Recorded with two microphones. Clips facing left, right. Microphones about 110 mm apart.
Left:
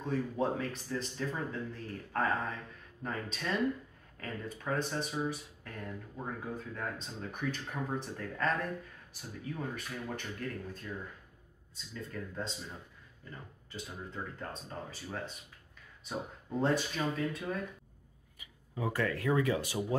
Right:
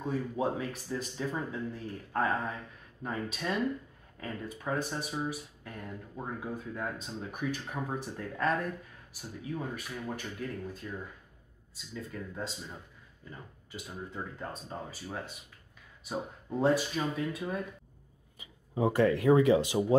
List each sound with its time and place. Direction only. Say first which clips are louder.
0.0 s speech: right 1 dB; 10° right (ahead or behind)
18.4 s speech: right 7 dB; 25° right (ahead or behind)